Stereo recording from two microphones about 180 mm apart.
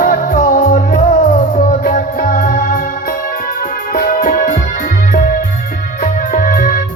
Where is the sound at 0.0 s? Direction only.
50° left (ahead or behind).